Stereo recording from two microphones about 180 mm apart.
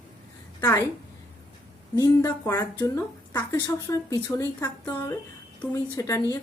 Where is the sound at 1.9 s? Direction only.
20° left (ahead or behind).